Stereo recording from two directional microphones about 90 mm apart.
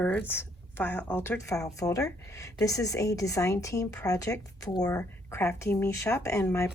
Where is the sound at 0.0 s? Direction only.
20° left (ahead or behind).